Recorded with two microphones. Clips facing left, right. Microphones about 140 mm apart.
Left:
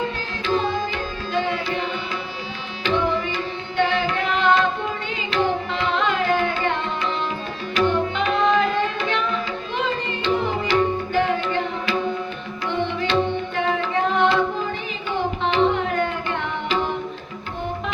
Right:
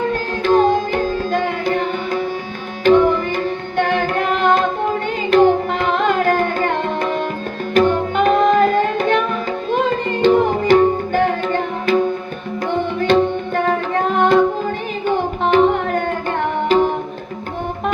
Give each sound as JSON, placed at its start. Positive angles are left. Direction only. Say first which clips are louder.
{"t": 0.1, "sound": "music", "louder": "right 8 dB", "side_deg": -50}
{"t": 2.8, "sound": "carnatic music", "louder": "right 9 dB", "side_deg": -50}
{"t": 7.7, "sound": "tabla", "louder": "right 5 dB", "side_deg": -50}
{"t": 9.7, "sound": "music", "louder": "right 7 dB", "side_deg": -50}
{"t": 12.6, "sound": "tabla", "louder": "right 6 dB", "side_deg": -50}